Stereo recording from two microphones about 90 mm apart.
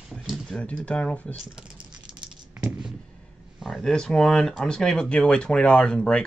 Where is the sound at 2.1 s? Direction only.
60° right (ahead or behind).